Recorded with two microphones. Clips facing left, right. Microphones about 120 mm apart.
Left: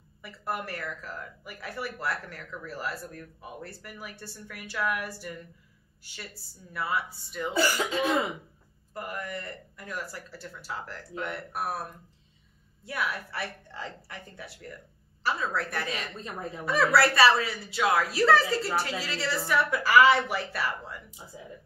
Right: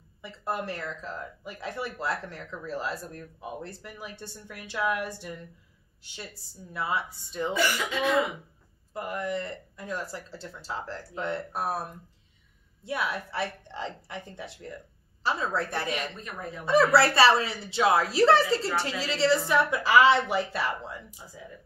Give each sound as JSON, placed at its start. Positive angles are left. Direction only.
{"t": 0.2, "sound": "speech", "side_deg": -25}
{"t": 6.7, "sound": "speech", "side_deg": -25}
{"t": 7.5, "sound": "speech", "side_deg": 35}
{"t": 8.9, "sound": "speech", "side_deg": -20}
{"t": 12.8, "sound": "speech", "side_deg": -25}
{"t": 21.3, "sound": "speech", "side_deg": 25}